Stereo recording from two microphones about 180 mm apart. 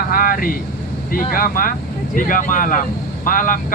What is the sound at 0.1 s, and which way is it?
Vehicle, 50° left (ahead or behind).